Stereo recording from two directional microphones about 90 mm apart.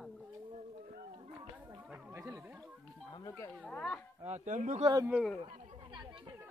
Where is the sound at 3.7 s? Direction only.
10° left (ahead or behind).